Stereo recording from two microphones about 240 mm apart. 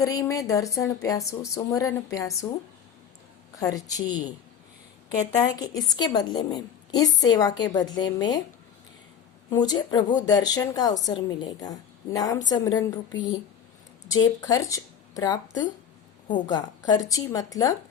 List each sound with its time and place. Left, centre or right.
0.0 s a woman's voice: centre
3.6 s a woman's voice: centre
5.4 s a woman's voice: centre
9.5 s a woman's voice: centre
14.2 s a woman's voice: centre